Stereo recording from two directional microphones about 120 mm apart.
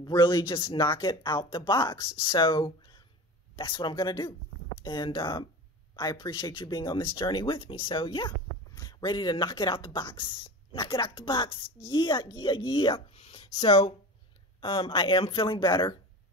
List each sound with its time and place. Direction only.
0.0 s speech: 35° left (ahead or behind)